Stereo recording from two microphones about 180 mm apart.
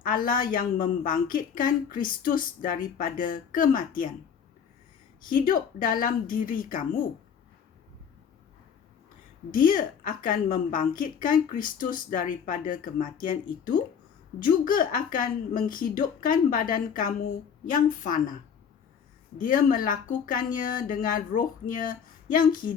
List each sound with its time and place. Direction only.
0.1 s a woman's voice: 50° left (ahead or behind)
5.2 s a woman's voice: 50° left (ahead or behind)
9.5 s a woman's voice: 50° left (ahead or behind)
19.4 s a woman's voice: 50° left (ahead or behind)